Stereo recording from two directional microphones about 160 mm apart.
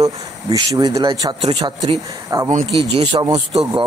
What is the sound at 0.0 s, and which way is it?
Speech, 20° right (ahead or behind).